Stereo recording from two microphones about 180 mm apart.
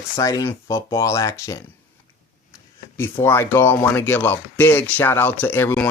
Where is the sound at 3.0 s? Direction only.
15° left (ahead or behind).